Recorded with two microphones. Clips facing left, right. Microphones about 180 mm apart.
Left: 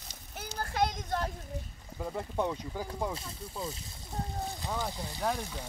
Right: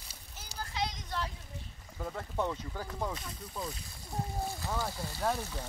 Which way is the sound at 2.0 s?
15° left (ahead or behind).